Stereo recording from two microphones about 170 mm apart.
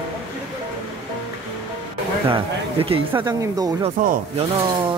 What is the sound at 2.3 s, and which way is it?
Speech, 30° right (ahead or behind).